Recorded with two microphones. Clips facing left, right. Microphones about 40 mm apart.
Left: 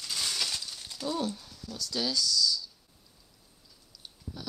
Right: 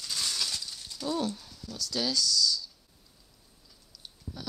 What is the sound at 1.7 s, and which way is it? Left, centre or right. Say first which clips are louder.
Speech: even; left.